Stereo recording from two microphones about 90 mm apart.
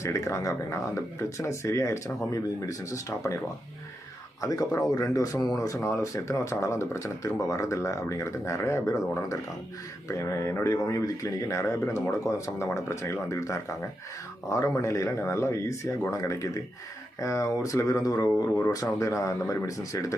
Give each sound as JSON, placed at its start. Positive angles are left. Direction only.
{"t": 0.0, "sound": "speech", "side_deg": 35}